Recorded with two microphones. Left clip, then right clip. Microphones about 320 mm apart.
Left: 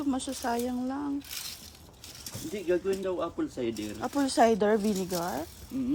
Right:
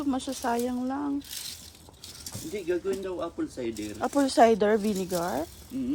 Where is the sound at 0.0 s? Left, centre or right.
Centre.